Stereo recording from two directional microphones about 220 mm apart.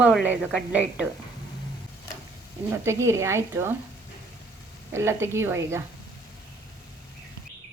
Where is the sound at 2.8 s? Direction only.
10° right (ahead or behind).